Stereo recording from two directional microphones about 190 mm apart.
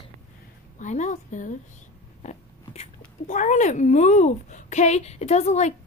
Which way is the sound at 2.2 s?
40° left (ahead or behind).